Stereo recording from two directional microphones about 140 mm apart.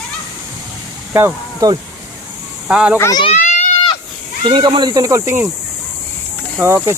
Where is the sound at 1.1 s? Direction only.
20° right (ahead or behind).